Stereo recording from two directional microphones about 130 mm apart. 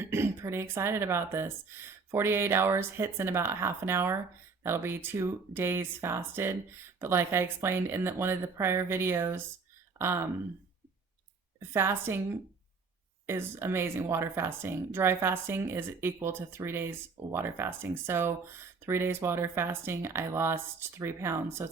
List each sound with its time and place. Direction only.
0.0 s speech: 20° right (ahead or behind)
11.6 s speech: 20° right (ahead or behind)
13.2 s speech: 20° right (ahead or behind)